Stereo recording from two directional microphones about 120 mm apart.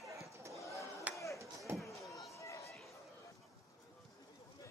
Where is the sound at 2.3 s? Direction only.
25° left (ahead or behind).